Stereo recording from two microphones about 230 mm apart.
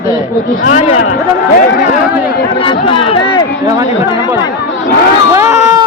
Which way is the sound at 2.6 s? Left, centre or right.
Left.